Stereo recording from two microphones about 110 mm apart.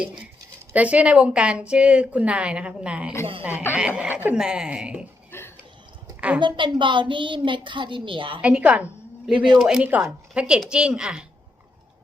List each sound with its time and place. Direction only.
0.7 s a woman's voice: 15° right (ahead or behind)
6.1 s a sound: 10° right (ahead or behind)
6.4 s a child's voice: 45° right (ahead or behind)
8.4 s a woman's voice: 10° right (ahead or behind)